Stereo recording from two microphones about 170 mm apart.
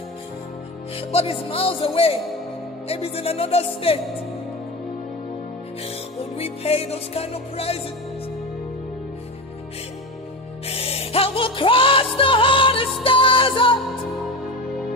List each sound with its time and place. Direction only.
0.9 s music: 35° left (ahead or behind)
6.3 s music: 35° left (ahead or behind)
10.7 s music: 35° left (ahead or behind)